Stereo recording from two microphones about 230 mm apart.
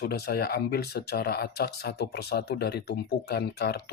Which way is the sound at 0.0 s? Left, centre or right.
Left.